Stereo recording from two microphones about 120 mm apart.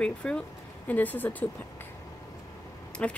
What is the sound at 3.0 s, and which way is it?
Speech, 10° left (ahead or behind).